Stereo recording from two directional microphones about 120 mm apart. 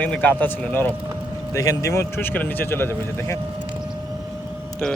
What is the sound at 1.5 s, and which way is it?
Speech, 30° left (ahead or behind).